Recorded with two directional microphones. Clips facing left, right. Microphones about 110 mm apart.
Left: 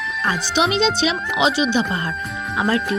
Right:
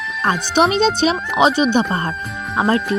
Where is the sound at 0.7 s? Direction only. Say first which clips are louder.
Right 3 dB; 45° right (ahead or behind).